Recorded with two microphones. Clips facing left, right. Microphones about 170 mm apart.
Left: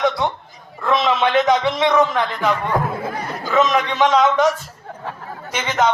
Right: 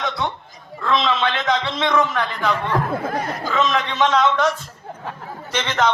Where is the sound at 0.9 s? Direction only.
15° left (ahead or behind).